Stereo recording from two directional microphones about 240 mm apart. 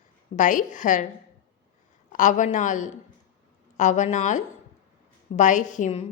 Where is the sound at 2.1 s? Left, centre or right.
Left.